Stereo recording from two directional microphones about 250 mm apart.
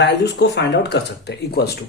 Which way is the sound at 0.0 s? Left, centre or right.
Left.